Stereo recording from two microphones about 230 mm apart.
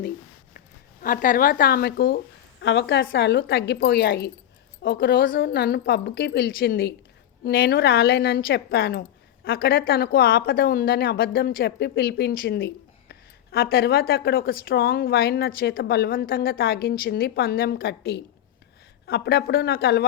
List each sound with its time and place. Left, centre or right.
1.0 s a woman's voice: left